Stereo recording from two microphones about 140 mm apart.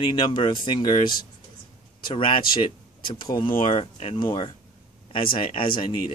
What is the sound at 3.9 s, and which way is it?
Speech, 50° left (ahead or behind).